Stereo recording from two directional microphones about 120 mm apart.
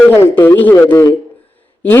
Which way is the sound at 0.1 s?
20° left (ahead or behind).